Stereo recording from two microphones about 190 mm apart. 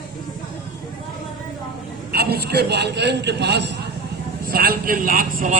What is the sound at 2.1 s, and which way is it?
A man's voice, 55° right (ahead or behind).